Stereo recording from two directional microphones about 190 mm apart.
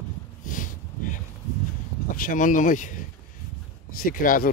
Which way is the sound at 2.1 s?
45° left (ahead or behind).